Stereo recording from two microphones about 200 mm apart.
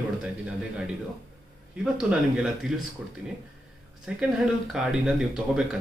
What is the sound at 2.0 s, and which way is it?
Speech, 5° right (ahead or behind).